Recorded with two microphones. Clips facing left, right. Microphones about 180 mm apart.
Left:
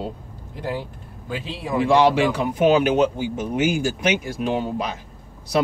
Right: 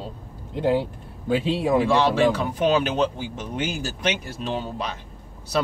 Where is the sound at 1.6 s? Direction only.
25° right (ahead or behind).